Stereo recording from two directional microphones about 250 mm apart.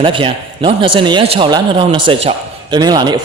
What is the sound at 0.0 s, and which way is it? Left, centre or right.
A man's voice, centre.